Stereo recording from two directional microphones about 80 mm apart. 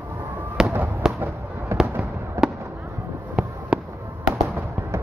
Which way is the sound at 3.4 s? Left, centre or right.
Centre.